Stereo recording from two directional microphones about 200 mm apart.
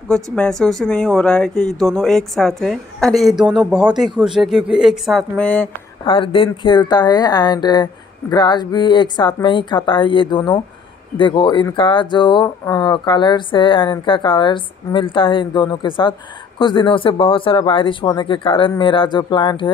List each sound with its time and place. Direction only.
0.1 s speech: 5° left (ahead or behind)
6.0 s speech: 25° left (ahead or behind)